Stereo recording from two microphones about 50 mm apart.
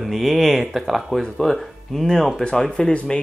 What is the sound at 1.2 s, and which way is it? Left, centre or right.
Speech, centre.